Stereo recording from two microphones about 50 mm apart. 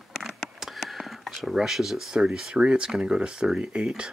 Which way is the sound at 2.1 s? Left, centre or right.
Centre.